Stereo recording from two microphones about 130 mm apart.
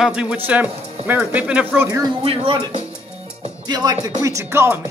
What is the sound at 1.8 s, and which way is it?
Speech, 30° right (ahead or behind).